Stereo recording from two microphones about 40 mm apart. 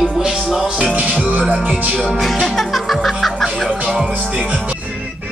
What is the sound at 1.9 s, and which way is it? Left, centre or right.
Music, centre.